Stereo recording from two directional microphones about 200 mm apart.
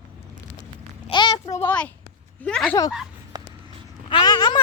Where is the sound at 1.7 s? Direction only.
5° left (ahead or behind).